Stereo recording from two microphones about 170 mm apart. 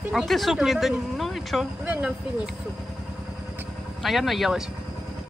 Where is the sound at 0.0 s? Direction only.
5° right (ahead or behind).